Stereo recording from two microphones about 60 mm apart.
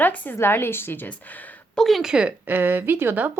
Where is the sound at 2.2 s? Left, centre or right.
Right.